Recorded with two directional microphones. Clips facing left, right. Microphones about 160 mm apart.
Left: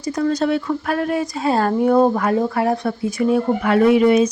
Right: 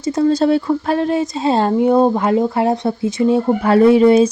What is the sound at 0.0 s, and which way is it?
Speech, 25° right (ahead or behind).